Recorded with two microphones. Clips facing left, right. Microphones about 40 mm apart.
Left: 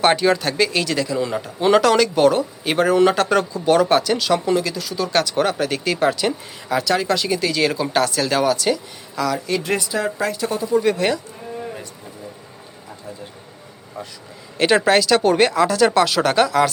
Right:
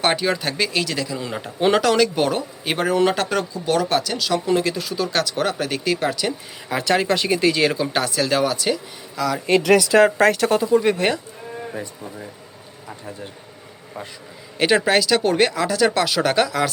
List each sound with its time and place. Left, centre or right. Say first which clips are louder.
0.0 s speech: left 4 dB; centre
4.5 s speech: right 1 dB; right
4.9 s speech: left 2 dB; centre
6.8 s speech: right 3 dB; right
7.8 s speech: left 2 dB; centre
9.6 s speech: right 8 dB; right
10.8 s speech: left 1 dB; right
14.6 s speech: left 2 dB; centre